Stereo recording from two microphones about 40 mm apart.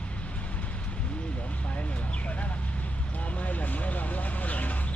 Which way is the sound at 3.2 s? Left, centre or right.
Left.